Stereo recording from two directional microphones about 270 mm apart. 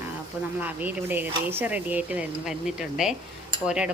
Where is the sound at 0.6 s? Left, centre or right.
Centre.